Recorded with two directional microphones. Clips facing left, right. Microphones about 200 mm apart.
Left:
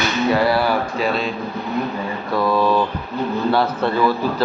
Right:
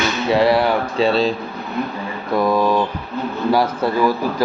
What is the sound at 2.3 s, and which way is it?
A man's voice, 20° right (ahead or behind).